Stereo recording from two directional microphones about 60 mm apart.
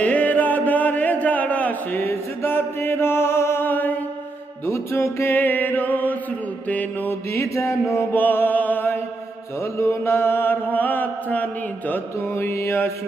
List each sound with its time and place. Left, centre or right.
0.0 s music: left
2.0 s chant: left
4.6 s mantra: left
7.3 s mantra: left
8.1 s mantra: left
9.7 s mantra: left
12.3 s mantra: left